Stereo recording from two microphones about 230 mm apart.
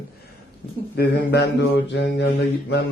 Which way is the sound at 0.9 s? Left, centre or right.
Left.